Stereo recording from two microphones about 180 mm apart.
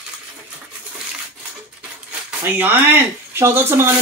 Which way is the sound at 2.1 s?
10° right (ahead or behind).